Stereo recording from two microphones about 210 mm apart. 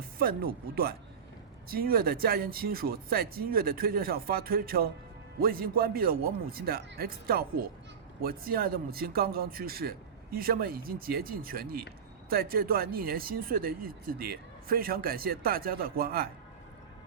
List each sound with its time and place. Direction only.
0.2 s speech: 45° right (ahead or behind)